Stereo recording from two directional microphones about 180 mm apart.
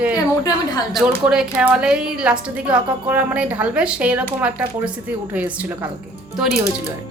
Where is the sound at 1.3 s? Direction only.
5° right (ahead or behind).